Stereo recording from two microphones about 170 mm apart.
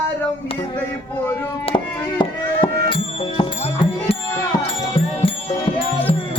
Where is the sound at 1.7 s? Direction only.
25° left (ahead or behind).